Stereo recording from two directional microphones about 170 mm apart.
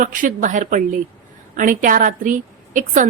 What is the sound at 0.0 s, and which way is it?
A woman's voice, 55° right (ahead or behind).